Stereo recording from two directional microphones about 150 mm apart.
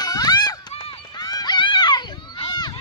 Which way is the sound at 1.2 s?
25° left (ahead or behind).